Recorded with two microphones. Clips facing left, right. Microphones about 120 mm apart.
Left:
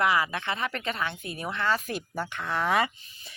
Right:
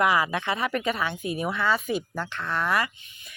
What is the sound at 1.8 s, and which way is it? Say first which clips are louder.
Speech: right 4 dB; centre (ahead or behind).